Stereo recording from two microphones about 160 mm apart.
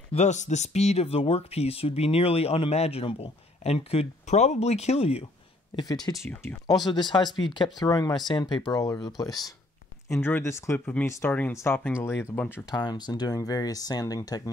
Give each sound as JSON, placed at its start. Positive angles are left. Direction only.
{"t": 0.1, "sound": "speech", "side_deg": 45}
{"t": 6.0, "sound": "speech", "side_deg": 20}